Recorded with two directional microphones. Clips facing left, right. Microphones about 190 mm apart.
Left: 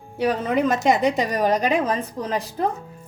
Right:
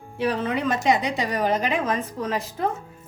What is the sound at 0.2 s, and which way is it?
A woman's voice, 45° left (ahead or behind).